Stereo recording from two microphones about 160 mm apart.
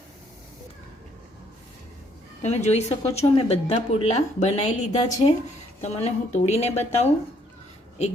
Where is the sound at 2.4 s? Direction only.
45° left (ahead or behind).